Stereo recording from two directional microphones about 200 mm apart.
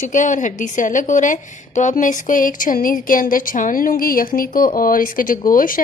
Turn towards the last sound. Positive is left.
turn(degrees=45)  # may be behind; listen again after turning